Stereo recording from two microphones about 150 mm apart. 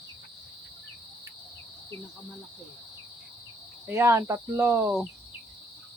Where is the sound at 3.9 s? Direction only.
15° right (ahead or behind).